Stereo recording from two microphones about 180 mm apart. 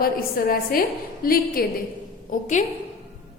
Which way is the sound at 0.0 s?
55° left (ahead or behind).